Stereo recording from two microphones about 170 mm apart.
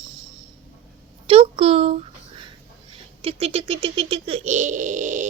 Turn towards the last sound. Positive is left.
turn(degrees=-45)  # may be behind; listen again after turning